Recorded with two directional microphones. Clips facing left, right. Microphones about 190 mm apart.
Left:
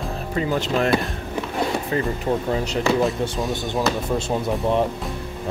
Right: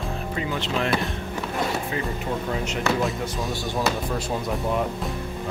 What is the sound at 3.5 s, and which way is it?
Speech, 20° left (ahead or behind).